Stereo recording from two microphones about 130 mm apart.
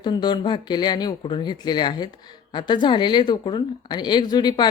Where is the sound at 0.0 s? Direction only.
35° left (ahead or behind).